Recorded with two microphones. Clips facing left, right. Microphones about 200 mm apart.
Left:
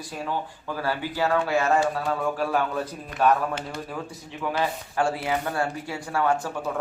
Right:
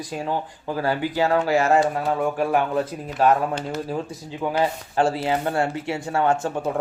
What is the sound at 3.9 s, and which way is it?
A man's voice, 30° right (ahead or behind).